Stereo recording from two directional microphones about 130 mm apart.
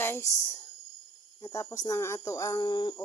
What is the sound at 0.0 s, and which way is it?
Speech, 20° left (ahead or behind).